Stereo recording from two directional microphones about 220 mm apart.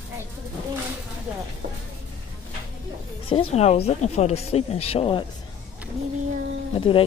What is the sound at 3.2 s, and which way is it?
A woman's voice, 25° left (ahead or behind).